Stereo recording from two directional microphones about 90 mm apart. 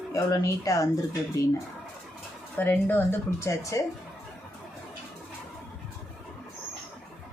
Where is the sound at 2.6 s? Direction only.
20° left (ahead or behind).